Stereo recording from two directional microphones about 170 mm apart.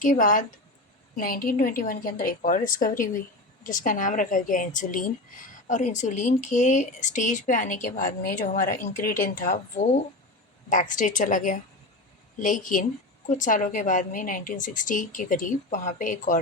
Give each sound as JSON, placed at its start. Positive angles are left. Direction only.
{"t": 0.0, "sound": "a woman's voice", "side_deg": 50}